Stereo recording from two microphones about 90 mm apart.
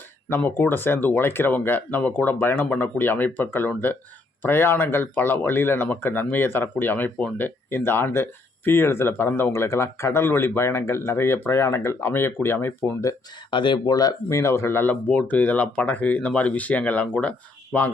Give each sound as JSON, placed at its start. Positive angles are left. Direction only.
{"t": 0.3, "sound": "speech", "side_deg": 25}
{"t": 13.5, "sound": "speech", "side_deg": 60}
{"t": 14.3, "sound": "speech", "side_deg": 35}